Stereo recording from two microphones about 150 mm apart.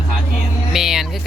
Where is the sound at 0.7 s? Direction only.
Centre (ahead or behind).